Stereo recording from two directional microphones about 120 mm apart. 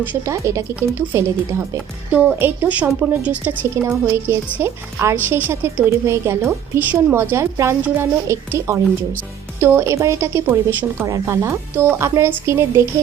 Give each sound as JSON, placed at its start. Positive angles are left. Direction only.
{"t": 0.0, "sound": "a woman's voice", "side_deg": -15}